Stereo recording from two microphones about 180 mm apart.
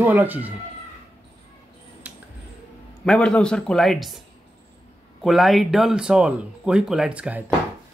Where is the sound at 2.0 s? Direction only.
10° right (ahead or behind).